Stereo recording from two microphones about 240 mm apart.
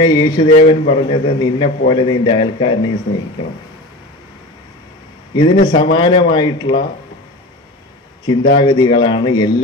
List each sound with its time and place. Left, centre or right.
0.0 s speech: centre
5.3 s a man's voice: centre
8.5 s speech: centre